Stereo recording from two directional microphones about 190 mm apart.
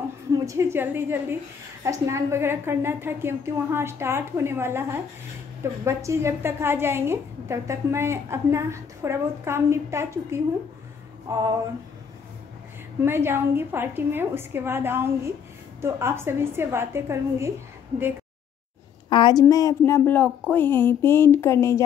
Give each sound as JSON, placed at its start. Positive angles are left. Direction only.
{"t": 0.5, "sound": "a woman's voice", "side_deg": -15}
{"t": 11.2, "sound": "a sound", "side_deg": -20}
{"t": 13.0, "sound": "a woman's voice", "side_deg": -10}
{"t": 19.0, "sound": "speech", "side_deg": 25}